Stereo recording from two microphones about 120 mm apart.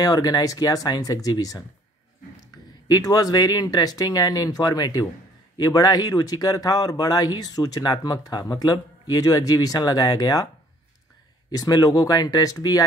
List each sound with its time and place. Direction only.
0.0 s speech: 30° left (ahead or behind)
2.9 s speech: 30° left (ahead or behind)
11.5 s speech: 30° left (ahead or behind)